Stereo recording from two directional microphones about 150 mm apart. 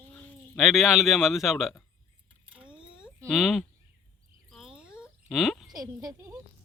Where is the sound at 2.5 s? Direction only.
5° right (ahead or behind).